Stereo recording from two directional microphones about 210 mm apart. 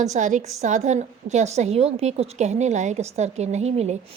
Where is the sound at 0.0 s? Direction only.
35° right (ahead or behind).